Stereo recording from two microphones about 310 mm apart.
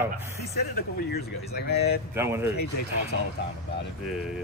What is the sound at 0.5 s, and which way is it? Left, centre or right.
Speech, left.